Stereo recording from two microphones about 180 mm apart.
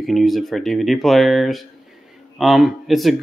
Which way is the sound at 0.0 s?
Centre (ahead or behind).